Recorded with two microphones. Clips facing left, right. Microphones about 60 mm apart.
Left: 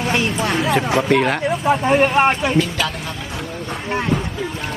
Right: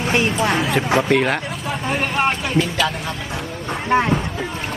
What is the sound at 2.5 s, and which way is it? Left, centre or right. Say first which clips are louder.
Speech: even; centre.